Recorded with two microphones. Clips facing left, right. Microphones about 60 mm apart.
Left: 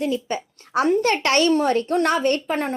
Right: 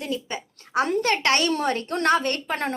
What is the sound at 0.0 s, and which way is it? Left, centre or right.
A woman's voice, left.